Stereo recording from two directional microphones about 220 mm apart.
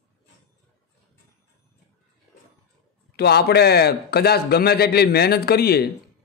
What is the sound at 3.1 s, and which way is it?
A man's voice, 45° left (ahead or behind).